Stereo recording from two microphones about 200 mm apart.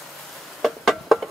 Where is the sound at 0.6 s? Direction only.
Centre (ahead or behind).